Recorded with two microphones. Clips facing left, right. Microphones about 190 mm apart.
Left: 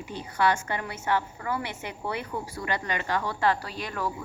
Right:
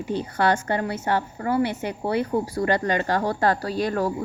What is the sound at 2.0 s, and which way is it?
Speech, 35° right (ahead or behind).